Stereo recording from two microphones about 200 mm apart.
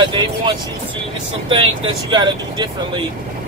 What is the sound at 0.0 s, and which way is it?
Speech, 25° right (ahead or behind).